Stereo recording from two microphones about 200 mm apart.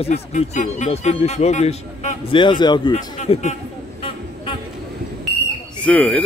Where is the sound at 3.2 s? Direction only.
35° left (ahead or behind).